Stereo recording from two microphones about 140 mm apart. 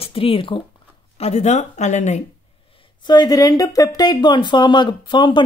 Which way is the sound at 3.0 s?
30° left (ahead or behind).